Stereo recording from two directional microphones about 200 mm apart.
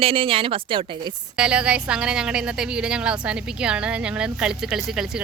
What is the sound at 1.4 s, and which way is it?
Speech, 5° right (ahead or behind).